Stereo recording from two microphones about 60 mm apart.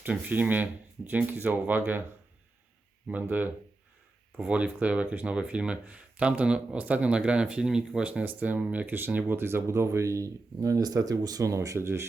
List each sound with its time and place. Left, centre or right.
0.3 s speech: right
3.1 s speech: right
8.2 s speech: right